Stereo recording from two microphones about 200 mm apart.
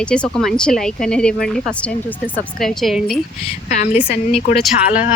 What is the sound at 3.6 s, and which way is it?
Speech, 40° left (ahead or behind).